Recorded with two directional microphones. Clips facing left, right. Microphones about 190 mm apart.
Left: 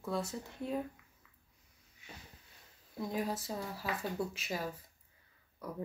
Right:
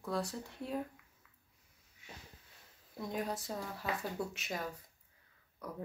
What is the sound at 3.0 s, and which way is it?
Speech, centre (ahead or behind).